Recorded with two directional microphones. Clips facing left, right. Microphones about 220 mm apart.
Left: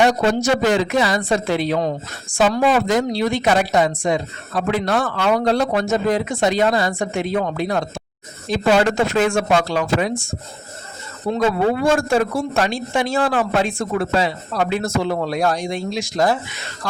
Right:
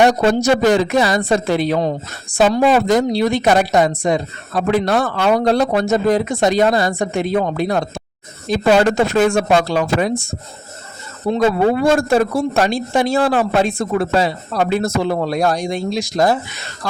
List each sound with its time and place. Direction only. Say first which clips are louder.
0.0 s speech: right 3 dB; 40° right (ahead or behind)
11.3 s speech: right 3 dB; 35° right (ahead or behind)